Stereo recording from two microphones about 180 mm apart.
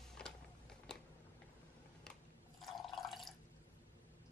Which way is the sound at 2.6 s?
Centre (ahead or behind).